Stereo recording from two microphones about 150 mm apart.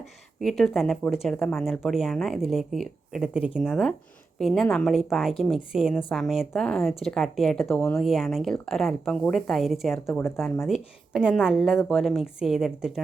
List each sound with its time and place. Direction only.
0.3 s speech: centre (ahead or behind)
10.1 s speech: 15° left (ahead or behind)
10.7 s speech: 5° right (ahead or behind)